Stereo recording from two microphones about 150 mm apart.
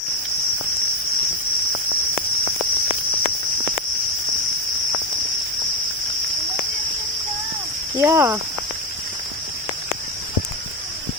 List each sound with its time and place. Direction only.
7.9 s speech: 20° right (ahead or behind)